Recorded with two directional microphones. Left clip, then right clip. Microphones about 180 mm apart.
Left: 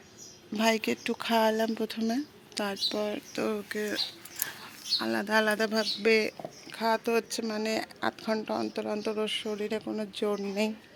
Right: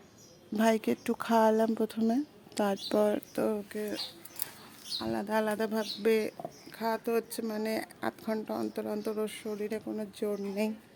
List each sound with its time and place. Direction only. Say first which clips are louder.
0.5 s speech: left 1 dB; 25° right (ahead or behind)
2.6 s speech: right 2 dB; 35° right (ahead or behind)
3.5 s speech: left 3 dB; 15° right (ahead or behind)